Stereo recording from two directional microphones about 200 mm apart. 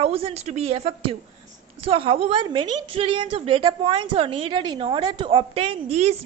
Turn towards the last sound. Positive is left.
turn(degrees=-30)  # may be behind; listen again after turning